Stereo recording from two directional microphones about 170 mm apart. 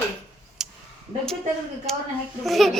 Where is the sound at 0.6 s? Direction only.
5° right (ahead or behind).